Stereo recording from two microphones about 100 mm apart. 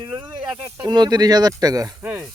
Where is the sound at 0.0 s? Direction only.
15° right (ahead or behind).